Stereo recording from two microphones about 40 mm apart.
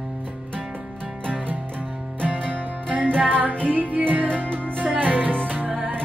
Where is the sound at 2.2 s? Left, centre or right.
Right.